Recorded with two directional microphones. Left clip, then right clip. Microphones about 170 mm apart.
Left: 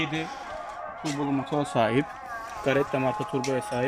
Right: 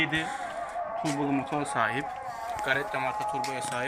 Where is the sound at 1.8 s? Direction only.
45° left (ahead or behind).